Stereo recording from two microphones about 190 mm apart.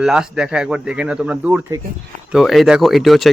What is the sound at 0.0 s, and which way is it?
Speech, 5° right (ahead or behind).